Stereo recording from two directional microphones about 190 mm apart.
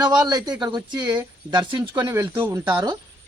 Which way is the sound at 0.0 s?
20° right (ahead or behind).